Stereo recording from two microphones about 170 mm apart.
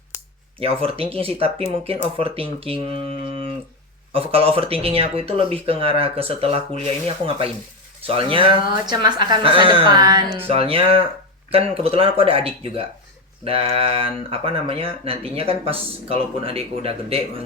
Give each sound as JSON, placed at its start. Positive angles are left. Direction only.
{"t": 0.6, "sound": "speech", "side_deg": -35}